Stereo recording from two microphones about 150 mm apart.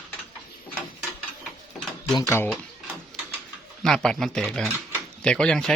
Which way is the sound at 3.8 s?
5° left (ahead or behind).